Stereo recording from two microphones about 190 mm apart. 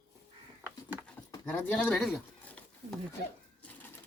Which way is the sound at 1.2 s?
20° left (ahead or behind).